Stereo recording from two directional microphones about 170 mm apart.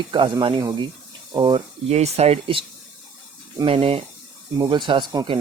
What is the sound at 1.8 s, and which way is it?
Speech, 40° right (ahead or behind).